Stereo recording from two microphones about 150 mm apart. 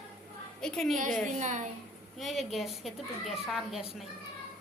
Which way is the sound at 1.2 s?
55° right (ahead or behind).